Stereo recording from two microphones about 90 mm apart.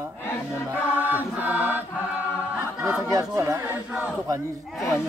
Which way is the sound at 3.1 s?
35° right (ahead or behind).